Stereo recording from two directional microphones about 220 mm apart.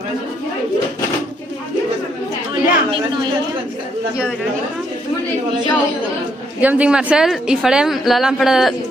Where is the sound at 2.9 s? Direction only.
20° right (ahead or behind).